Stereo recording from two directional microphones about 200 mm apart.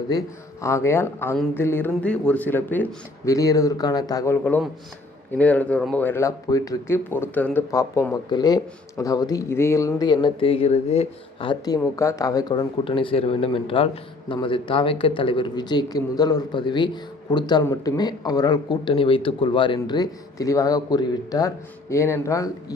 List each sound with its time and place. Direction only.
0.1 s speech: 15° left (ahead or behind)